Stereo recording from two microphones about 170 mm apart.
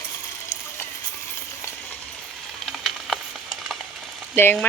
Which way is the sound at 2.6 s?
Centre (ahead or behind).